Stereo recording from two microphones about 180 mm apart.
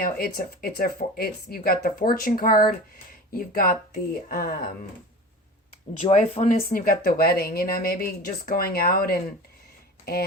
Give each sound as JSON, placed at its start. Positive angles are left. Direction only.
{"t": 0.0, "sound": "speech", "side_deg": 55}
{"t": 6.1, "sound": "speech", "side_deg": 40}